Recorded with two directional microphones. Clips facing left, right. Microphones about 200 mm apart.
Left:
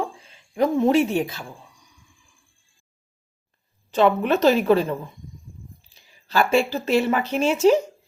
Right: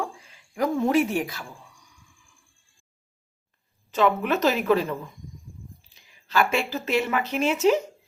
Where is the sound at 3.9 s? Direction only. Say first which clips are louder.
Left 4 dB; 30° left (ahead or behind).